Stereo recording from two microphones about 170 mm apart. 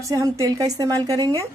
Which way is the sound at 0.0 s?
20° right (ahead or behind).